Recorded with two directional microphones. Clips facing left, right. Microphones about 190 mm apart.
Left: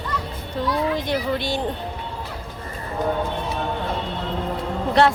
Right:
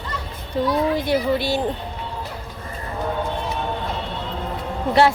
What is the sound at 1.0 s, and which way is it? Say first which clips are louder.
Speech: right 3 dB; 5° right (ahead or behind).